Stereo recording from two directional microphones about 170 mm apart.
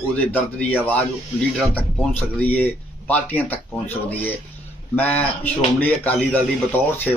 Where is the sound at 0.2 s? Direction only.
10° left (ahead or behind).